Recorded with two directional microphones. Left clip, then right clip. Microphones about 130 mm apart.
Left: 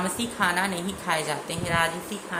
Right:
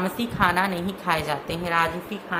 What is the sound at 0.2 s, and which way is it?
A woman's voice, 40° right (ahead or behind).